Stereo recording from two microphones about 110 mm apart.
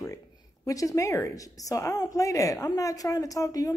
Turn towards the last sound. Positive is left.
turn(degrees=30)  # may be behind; listen again after turning